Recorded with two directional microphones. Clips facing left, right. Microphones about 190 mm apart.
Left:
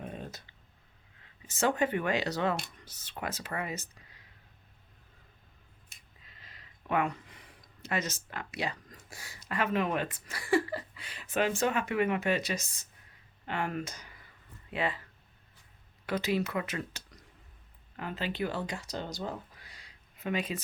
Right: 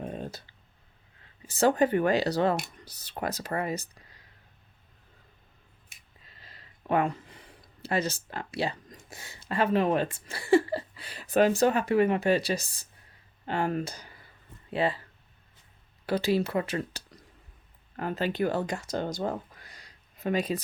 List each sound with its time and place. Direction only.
0.0 s a sound: 35° right (ahead or behind)
1.5 s speech: 35° right (ahead or behind)
6.2 s a sound: 35° right (ahead or behind)
8.9 s speech: 20° right (ahead or behind)
16.0 s speech: 30° right (ahead or behind)
17.9 s speech: 45° right (ahead or behind)